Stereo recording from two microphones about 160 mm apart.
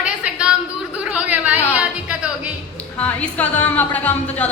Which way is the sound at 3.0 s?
10° left (ahead or behind).